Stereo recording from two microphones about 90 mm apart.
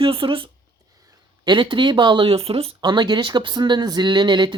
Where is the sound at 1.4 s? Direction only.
60° right (ahead or behind); by 2.8 s 90° right.